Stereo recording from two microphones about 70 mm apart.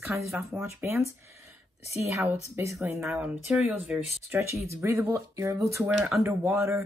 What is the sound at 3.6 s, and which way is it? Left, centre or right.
Speech, right.